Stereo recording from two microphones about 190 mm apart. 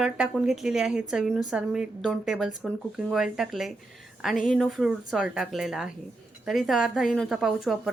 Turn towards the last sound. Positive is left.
turn(degrees=0)  # may be behind; listen again after turning